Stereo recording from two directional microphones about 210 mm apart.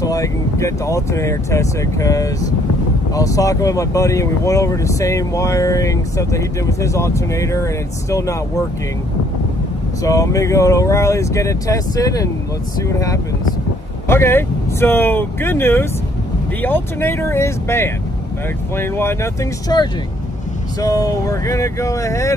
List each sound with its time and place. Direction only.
0.0 s speech: 15° left (ahead or behind)
10.0 s speech: 15° left (ahead or behind)